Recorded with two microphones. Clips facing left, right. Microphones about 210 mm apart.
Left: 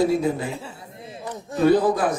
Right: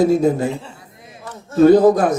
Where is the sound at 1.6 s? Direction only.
45° right (ahead or behind).